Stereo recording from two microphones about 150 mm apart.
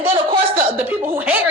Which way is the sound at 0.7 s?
15° right (ahead or behind).